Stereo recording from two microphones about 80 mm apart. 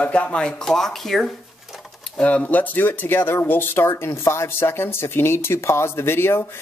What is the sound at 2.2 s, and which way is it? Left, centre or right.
Speech, centre.